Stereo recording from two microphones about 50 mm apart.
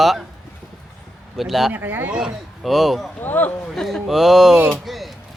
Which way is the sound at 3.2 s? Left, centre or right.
Left.